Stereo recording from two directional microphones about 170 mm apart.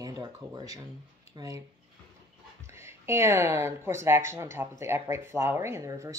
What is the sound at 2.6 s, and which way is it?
Speech, 15° right (ahead or behind).